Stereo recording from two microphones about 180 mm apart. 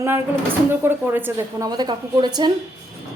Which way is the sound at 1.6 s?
25° right (ahead or behind).